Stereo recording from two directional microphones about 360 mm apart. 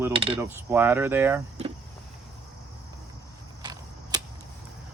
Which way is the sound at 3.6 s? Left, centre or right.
Centre.